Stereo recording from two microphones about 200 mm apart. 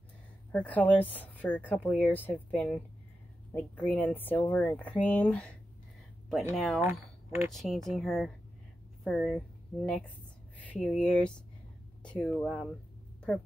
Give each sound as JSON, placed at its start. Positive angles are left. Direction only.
{"t": 0.5, "sound": "speech", "side_deg": 5}